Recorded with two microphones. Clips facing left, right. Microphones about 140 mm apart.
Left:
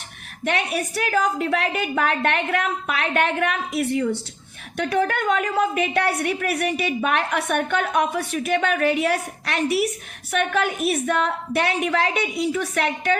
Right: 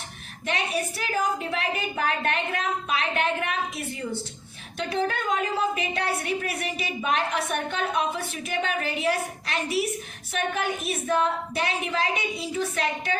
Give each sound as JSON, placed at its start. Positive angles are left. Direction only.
{"t": 0.4, "sound": "a woman's voice", "side_deg": 65}